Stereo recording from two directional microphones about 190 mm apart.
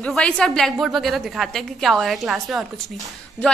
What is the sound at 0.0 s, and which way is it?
A woman's voice, 5° left (ahead or behind).